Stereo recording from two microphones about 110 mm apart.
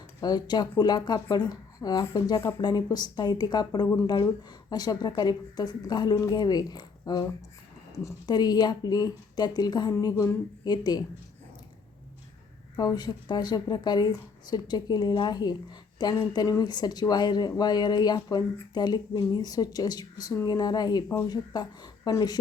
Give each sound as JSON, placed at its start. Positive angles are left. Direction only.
{"t": 0.2, "sound": "speech", "side_deg": 40}
{"t": 8.3, "sound": "speech", "side_deg": 40}
{"t": 12.7, "sound": "speech", "side_deg": 35}